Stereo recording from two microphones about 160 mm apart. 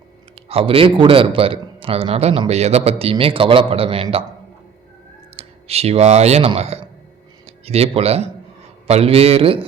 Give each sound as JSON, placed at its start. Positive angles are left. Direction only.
{"t": 0.4, "sound": "a man's voice", "side_deg": -35}
{"t": 5.4, "sound": "a man's voice", "side_deg": -40}